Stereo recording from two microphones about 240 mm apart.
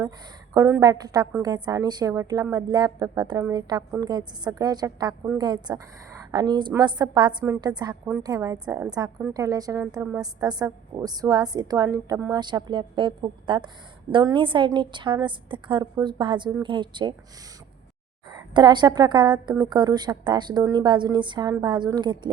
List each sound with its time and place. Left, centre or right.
0.5 s a woman's voice: centre
18.5 s a woman's voice: centre